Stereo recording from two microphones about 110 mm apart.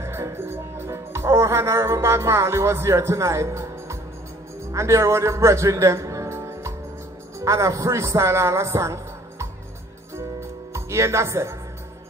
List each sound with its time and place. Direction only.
0.0 s music: 25° right (ahead or behind)
4.7 s a man's voice: 25° right (ahead or behind)
10.7 s speech: 25° right (ahead or behind)